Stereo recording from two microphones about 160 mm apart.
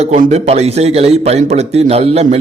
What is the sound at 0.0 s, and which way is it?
A man's voice, 45° right (ahead or behind).